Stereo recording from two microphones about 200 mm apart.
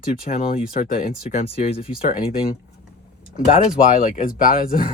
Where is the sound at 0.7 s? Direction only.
40° left (ahead or behind).